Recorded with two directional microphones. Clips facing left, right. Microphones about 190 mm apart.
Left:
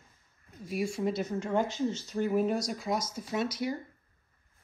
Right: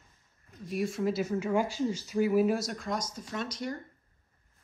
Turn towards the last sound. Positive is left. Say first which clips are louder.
# left 4 dB
turn(degrees=5)  # may be behind; listen again after turning